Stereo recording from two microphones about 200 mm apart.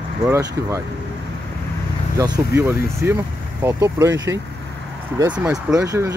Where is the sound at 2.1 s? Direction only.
20° right (ahead or behind).